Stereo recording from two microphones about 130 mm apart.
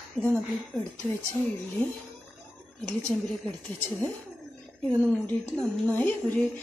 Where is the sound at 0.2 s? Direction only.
10° left (ahead or behind).